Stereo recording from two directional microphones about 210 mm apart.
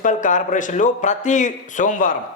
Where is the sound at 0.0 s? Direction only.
35° left (ahead or behind).